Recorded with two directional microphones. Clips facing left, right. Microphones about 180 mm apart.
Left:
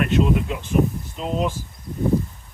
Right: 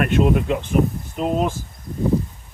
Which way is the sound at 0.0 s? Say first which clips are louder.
Right 2 dB; 60° right (ahead or behind).